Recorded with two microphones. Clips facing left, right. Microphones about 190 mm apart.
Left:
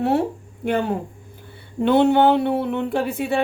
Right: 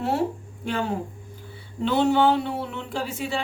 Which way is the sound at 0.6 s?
55° left (ahead or behind).